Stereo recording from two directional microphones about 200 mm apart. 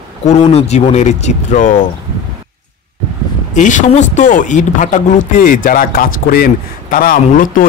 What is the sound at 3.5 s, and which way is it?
A man's voice, 40° left (ahead or behind).